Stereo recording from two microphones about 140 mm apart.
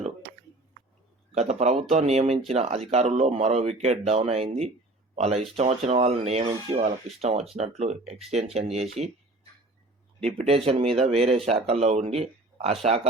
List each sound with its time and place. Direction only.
1.3 s speech: 50° right (ahead or behind)
10.4 s speech: 45° right (ahead or behind)